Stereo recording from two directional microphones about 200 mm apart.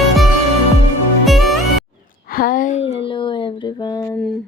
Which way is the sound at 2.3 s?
45° left (ahead or behind).